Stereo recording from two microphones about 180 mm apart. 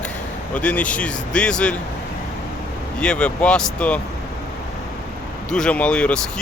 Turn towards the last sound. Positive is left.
turn(degrees=5)  # may be behind; listen again after turning